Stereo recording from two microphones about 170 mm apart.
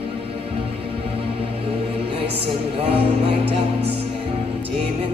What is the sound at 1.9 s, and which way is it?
Music, 35° right (ahead or behind).